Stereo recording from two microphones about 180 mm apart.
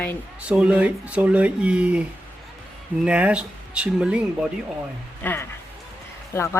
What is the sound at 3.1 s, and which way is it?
Speech, 5° right (ahead or behind).